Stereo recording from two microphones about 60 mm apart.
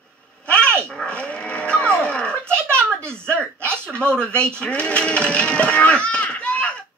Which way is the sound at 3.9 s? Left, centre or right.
Centre.